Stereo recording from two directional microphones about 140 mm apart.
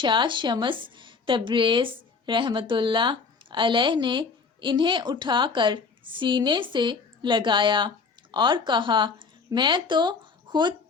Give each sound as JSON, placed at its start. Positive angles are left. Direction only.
{"t": 0.0, "sound": "a woman's voice", "side_deg": -35}